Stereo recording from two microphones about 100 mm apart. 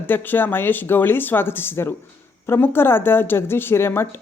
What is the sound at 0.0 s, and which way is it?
A woman's voice, 20° left (ahead or behind).